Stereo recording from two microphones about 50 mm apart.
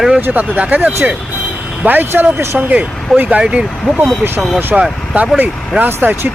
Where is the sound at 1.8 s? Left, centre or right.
Right; by 3.6 s centre.